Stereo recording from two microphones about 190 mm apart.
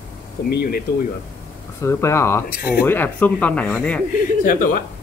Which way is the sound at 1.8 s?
15° left (ahead or behind).